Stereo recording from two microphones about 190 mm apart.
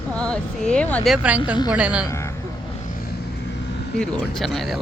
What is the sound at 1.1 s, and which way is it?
Speech, 5° right (ahead or behind).